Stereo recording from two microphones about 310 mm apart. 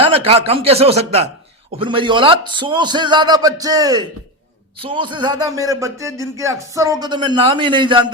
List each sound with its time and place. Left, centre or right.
0.0 s a man's voice: centre